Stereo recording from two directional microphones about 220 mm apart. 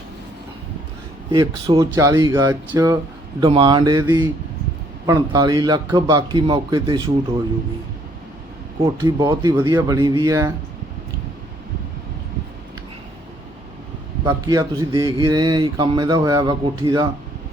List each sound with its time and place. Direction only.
1.3 s speech: 20° right (ahead or behind)
8.8 s speech: 20° right (ahead or behind)
14.3 s speech: 15° right (ahead or behind)